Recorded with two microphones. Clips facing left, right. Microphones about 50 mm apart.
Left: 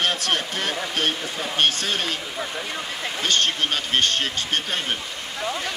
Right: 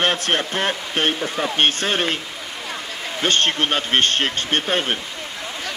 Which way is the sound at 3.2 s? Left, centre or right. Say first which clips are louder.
Right 4 dB; right.